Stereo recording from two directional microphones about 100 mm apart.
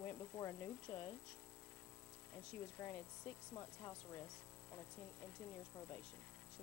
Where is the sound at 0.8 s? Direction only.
20° left (ahead or behind).